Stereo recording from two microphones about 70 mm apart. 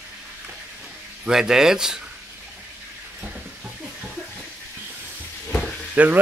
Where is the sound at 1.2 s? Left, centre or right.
Centre.